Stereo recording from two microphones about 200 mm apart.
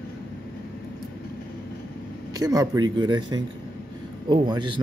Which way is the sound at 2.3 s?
20° right (ahead or behind).